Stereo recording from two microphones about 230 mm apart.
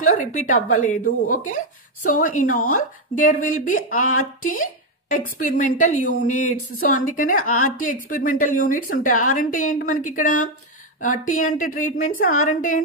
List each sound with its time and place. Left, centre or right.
0.2 s speech: left
2.4 s speech: left
3.2 s speech: left
4.0 s speech: left
5.1 s speech: left
6.0 s speech: left
6.9 s speech: left